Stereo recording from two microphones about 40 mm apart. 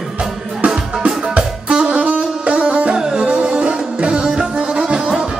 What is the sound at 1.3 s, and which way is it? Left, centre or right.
Music, right.